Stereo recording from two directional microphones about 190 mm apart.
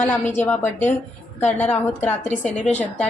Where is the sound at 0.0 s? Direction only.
10° left (ahead or behind).